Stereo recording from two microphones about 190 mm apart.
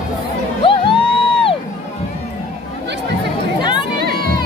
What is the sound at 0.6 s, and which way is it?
Music, 25° left (ahead or behind).